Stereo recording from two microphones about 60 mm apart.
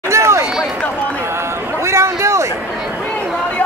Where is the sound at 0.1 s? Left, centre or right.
Right.